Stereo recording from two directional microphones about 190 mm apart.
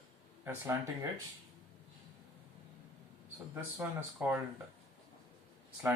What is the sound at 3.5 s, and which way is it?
Speech, 10° right (ahead or behind).